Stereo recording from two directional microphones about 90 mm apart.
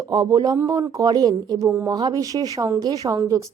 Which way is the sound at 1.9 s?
50° right (ahead or behind).